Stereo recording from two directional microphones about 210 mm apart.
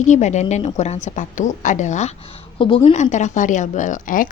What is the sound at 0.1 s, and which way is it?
A woman's voice, 35° left (ahead or behind).